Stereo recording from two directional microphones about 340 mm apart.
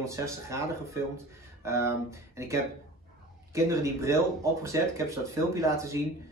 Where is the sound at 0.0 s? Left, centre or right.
Centre.